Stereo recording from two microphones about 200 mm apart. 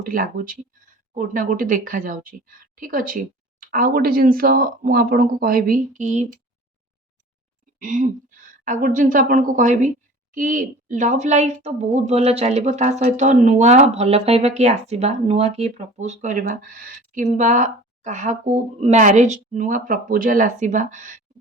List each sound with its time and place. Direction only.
0.1 s speech: 45° right (ahead or behind)
7.8 s speech: 40° right (ahead or behind)